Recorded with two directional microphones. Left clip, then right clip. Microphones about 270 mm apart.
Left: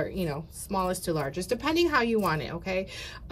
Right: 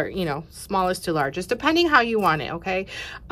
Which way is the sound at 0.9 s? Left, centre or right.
Centre.